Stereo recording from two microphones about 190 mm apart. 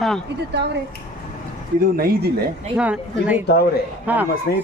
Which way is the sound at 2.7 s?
5° right (ahead or behind).